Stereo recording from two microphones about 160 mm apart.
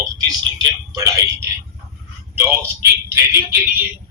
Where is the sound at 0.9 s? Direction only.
20° right (ahead or behind).